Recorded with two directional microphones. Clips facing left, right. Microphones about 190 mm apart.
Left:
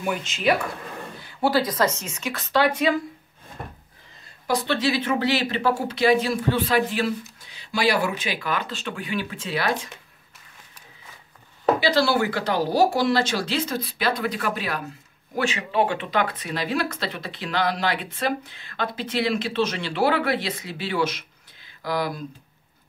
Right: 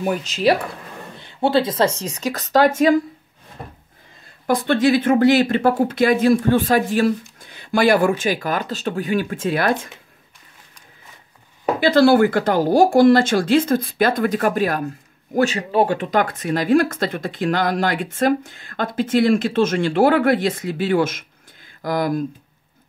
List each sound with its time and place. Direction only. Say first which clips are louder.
0.0 s speech: right 5 dB; 40° right (ahead or behind)
1.2 s speech: right 4 dB; 25° right (ahead or behind); by 3.0 s 45° right (ahead or behind)
4.5 s speech: right 7 dB; 50° right (ahead or behind)
11.8 s speech: right 12 dB; 55° right (ahead or behind)